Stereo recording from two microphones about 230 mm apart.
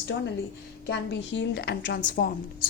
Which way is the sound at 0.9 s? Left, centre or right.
Left.